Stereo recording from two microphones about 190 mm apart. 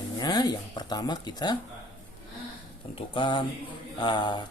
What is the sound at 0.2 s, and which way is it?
Speech, 20° left (ahead or behind).